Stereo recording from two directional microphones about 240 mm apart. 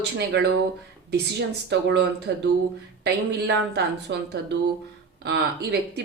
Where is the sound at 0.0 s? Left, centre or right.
Right.